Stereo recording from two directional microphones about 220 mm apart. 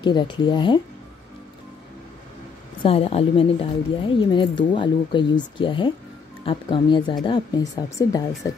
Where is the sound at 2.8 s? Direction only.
25° left (ahead or behind).